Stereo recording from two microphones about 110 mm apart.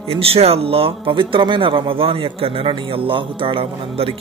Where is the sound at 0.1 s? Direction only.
60° right (ahead or behind).